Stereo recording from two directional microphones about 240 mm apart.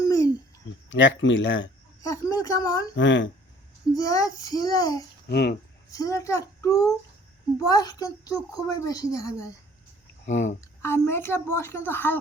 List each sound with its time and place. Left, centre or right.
0.0 s a sound: centre
0.9 s speech: left
2.0 s speech: centre
2.9 s speech: left
3.9 s a woman's voice: centre
5.3 s speech: left
5.9 s a woman's voice: centre
10.2 s speech: left
10.6 s a woman's voice: centre